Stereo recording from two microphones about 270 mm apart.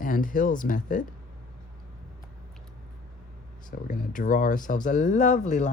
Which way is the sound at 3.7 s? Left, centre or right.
Left.